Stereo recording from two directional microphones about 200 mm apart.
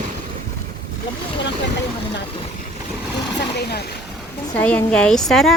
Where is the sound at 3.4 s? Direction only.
55° left (ahead or behind).